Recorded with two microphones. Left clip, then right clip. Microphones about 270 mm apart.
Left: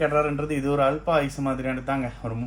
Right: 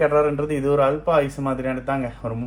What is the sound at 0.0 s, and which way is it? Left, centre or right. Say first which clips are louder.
A man's voice: right 4 dB; centre.